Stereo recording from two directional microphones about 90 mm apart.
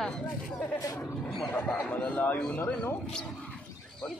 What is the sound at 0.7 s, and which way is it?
Speech, 40° left (ahead or behind).